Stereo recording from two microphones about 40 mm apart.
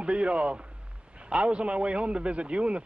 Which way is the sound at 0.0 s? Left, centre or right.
Right.